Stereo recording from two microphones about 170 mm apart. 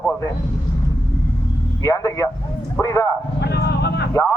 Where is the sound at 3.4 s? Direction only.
75° left (ahead or behind).